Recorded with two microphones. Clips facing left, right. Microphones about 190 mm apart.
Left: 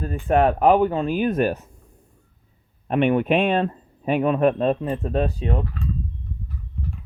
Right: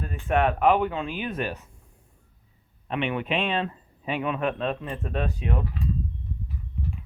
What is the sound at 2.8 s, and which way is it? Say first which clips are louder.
A man's voice: left 9 dB; 45° left (ahead or behind).